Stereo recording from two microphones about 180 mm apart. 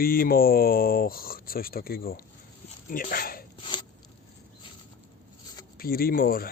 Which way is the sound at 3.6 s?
25° left (ahead or behind).